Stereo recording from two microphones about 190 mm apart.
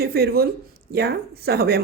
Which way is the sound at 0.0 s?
55° right (ahead or behind).